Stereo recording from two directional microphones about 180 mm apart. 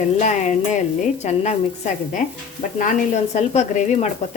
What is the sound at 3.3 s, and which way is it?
Speech, 40° left (ahead or behind).